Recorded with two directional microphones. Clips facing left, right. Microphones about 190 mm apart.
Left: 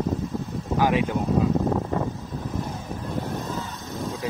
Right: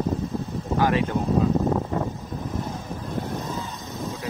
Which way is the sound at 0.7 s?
10° left (ahead or behind).